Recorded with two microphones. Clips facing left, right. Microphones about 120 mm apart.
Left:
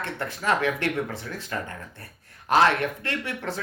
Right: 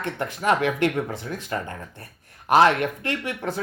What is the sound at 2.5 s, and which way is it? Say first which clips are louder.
Speech: right 3 dB; 15° right (ahead or behind).